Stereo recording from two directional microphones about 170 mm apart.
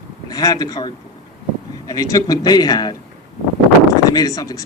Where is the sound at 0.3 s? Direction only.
20° left (ahead or behind).